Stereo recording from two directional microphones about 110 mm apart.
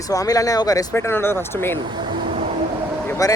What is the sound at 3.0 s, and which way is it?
Vehicle, 30° left (ahead or behind).